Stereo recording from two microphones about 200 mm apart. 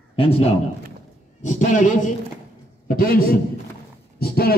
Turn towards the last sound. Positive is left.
turn(degrees=50)  # may be behind; listen again after turning